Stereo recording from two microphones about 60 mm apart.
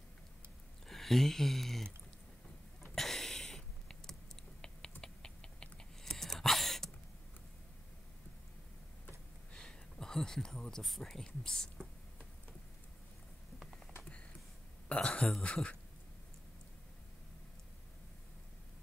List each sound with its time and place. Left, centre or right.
0.8 s speech: centre
2.8 s typing: centre
5.0 s a sound: centre
9.5 s speech: centre
15.0 s speech: centre